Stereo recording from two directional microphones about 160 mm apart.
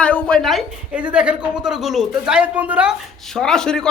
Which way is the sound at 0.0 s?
10° left (ahead or behind).